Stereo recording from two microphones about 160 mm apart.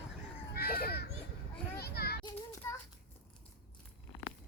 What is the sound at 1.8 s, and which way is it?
Children playing, 80° left.